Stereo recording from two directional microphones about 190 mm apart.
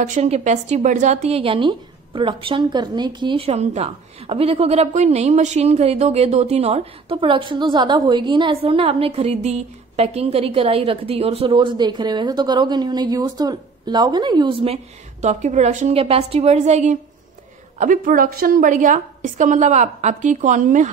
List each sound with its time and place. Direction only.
0.0 s a woman's voice: 40° right (ahead or behind)